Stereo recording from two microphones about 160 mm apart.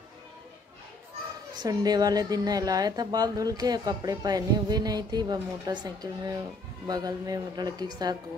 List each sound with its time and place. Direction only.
1.6 s a woman's voice: 25° right (ahead or behind)